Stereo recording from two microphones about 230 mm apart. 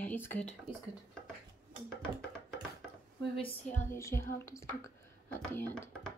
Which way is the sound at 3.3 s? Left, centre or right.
Left.